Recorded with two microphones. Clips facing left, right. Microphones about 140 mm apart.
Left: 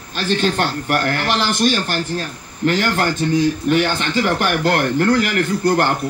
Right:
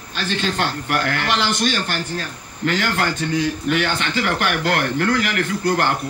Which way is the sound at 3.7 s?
40° left (ahead or behind).